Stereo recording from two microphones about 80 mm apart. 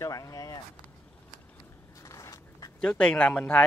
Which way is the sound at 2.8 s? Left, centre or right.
Centre.